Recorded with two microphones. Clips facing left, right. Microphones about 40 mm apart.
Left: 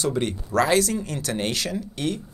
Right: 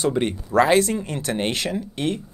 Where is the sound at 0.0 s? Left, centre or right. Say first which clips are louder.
Right 3 dB; right.